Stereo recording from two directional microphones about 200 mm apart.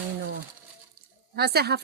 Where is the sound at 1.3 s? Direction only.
50° right (ahead or behind).